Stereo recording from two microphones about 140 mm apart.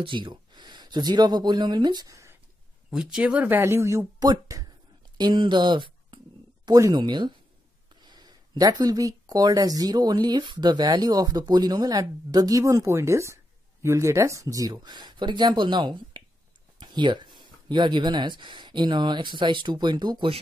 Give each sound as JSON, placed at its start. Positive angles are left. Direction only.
{"t": 0.0, "sound": "speech", "side_deg": -35}
{"t": 2.9, "sound": "speech", "side_deg": -5}